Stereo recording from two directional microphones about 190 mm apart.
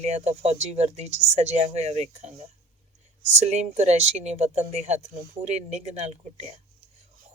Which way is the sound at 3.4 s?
35° right (ahead or behind).